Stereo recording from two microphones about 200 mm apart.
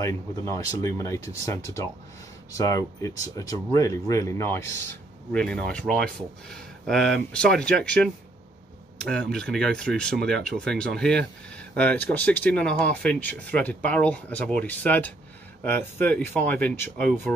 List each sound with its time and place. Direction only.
0.0 s speech: 15° left (ahead or behind)